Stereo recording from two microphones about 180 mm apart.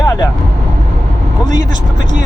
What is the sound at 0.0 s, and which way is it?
Vehicle, 20° left (ahead or behind).